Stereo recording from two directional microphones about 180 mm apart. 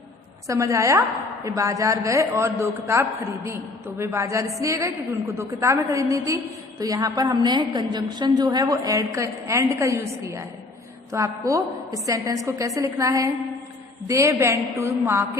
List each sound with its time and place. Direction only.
0.4 s a woman's voice: 15° right (ahead or behind)